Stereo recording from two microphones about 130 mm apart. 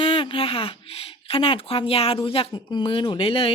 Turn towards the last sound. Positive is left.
turn(degrees=45)  # may be behind; listen again after turning